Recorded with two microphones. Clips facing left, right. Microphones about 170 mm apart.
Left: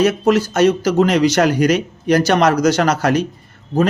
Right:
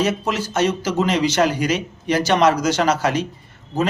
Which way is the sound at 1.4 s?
45° left (ahead or behind).